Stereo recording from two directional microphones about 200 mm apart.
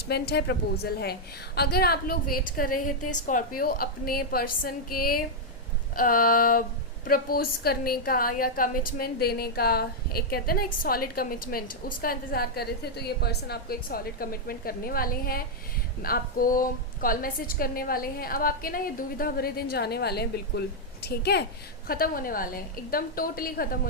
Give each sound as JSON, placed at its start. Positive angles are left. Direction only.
{"t": 0.1, "sound": "a woman's voice", "side_deg": 55}